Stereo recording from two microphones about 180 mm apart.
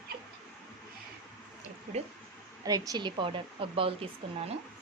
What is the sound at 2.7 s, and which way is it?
A woman's voice, 20° right (ahead or behind).